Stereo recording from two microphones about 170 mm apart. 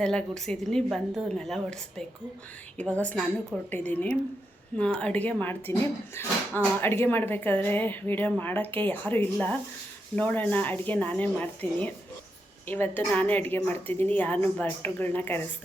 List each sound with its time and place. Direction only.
0.0 s a woman's voice: 5° left (ahead or behind)